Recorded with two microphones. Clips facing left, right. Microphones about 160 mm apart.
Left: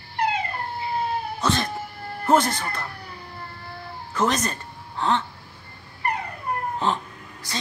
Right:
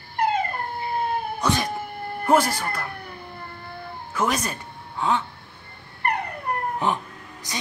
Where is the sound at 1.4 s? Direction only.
15° right (ahead or behind).